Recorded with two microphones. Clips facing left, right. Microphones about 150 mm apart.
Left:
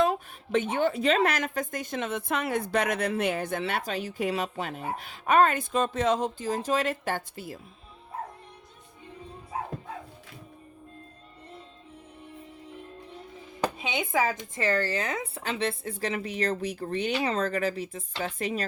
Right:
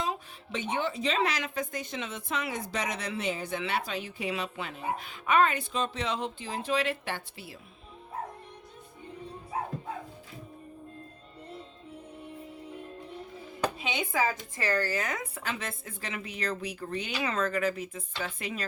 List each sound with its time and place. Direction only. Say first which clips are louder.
0.0 s a woman's voice: left 8 dB; 55° left (ahead or behind)
3.6 s a woman's voice: left 2 dB; 45° left (ahead or behind)
13.8 s speech: left 3 dB; 20° left (ahead or behind); by 18.6 s 40° left (ahead or behind)